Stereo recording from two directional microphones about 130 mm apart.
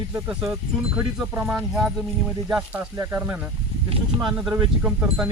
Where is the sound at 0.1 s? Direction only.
15° right (ahead or behind).